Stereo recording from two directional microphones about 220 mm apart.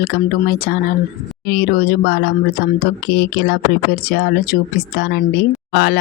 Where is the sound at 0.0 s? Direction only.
45° left (ahead or behind).